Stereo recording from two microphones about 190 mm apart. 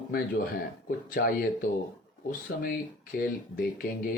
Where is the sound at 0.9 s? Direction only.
50° left (ahead or behind).